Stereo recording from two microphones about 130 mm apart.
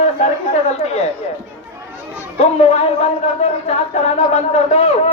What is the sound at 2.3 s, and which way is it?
Speech, 55° left (ahead or behind).